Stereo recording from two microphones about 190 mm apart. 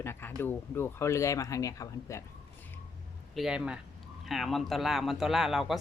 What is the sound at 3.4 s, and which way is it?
Speech, 5° right (ahead or behind).